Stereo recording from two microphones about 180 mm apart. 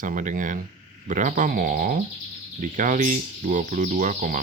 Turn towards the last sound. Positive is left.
turn(degrees=-45)  # may be behind; listen again after turning